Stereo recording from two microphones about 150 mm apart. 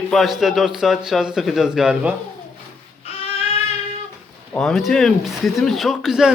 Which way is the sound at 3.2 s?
40° left (ahead or behind).